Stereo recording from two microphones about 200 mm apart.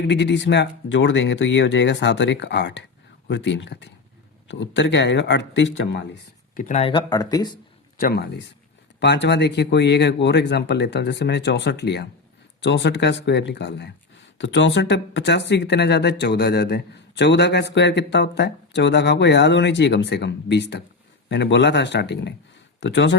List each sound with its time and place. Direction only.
0.1 s speech: 60° left (ahead or behind)
6.6 s speech: 35° left (ahead or behind)
7.1 s speech: 20° left (ahead or behind)
7.9 s speech: 50° left (ahead or behind)